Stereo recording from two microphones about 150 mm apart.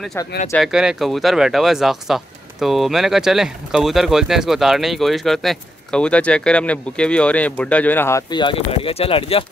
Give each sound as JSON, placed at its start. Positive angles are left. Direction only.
{"t": 0.6, "sound": "speech", "side_deg": -5}
{"t": 8.3, "sound": "speech", "side_deg": 30}